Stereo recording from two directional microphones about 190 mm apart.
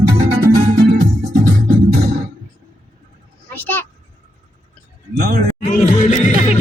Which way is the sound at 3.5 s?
10° left (ahead or behind).